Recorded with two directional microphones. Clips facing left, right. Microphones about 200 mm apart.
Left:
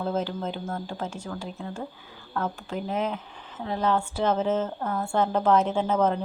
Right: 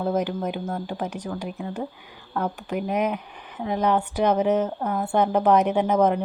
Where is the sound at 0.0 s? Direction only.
15° right (ahead or behind).